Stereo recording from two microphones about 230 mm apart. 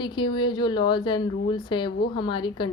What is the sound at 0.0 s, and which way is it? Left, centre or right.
A woman's voice, centre.